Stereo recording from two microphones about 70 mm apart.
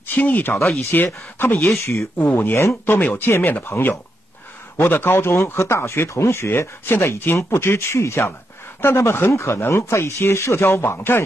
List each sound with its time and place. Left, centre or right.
0.0 s speech: left
1.8 s speech: left
2.1 s speech: left